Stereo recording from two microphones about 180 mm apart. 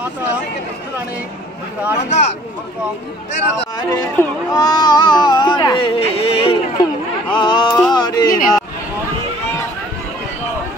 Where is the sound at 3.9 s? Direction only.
15° left (ahead or behind); by 6.6 s 30° left (ahead or behind).